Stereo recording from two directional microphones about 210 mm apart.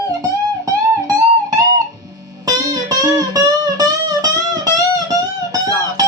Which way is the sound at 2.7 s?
15° right (ahead or behind).